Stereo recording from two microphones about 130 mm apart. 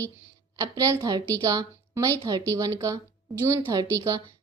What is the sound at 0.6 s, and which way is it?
A woman's voice, 25° right (ahead or behind).